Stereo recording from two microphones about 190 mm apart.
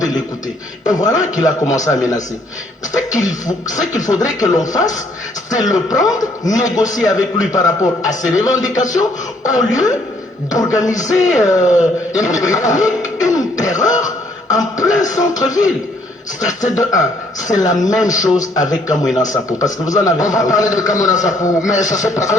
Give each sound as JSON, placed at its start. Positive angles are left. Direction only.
{"t": 0.9, "sound": "a man's voice", "side_deg": 20}
{"t": 4.1, "sound": "a man's voice", "side_deg": 20}
{"t": 13.3, "sound": "throat clearing", "side_deg": 20}
{"t": 14.0, "sound": "music", "side_deg": 20}
{"t": 15.1, "sound": "a man's voice", "side_deg": 20}